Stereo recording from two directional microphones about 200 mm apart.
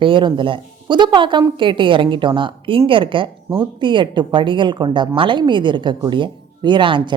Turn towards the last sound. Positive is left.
turn(degrees=-25)  # may be behind; listen again after turning